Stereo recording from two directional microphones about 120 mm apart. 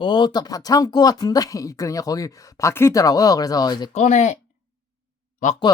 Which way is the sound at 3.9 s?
85° left.